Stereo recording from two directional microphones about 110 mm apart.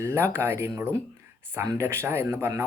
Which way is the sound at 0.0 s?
25° right (ahead or behind).